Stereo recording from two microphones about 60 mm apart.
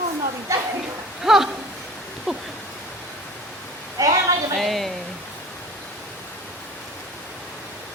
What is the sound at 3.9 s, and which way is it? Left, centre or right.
Speech, right.